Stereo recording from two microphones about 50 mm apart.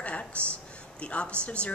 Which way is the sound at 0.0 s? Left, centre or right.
Left.